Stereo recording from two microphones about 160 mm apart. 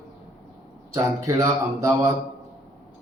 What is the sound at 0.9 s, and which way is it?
Speech, 20° right (ahead or behind).